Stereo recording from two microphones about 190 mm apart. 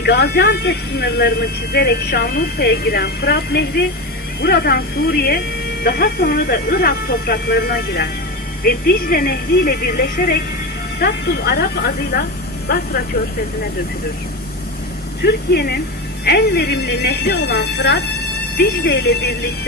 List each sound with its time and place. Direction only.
0.0 s speech: 60° left (ahead or behind)
15.2 s speech: 55° left (ahead or behind)